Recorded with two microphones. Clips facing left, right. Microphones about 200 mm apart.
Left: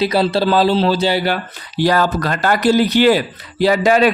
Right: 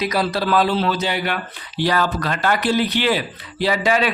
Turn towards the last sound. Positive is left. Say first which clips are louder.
# left 6 dB
turn(degrees=45)  # may be behind; listen again after turning